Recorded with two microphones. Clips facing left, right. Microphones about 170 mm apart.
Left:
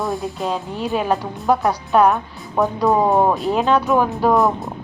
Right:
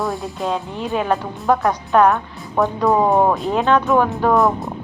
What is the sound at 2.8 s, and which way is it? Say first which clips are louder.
Speech: even; 5° left (ahead or behind).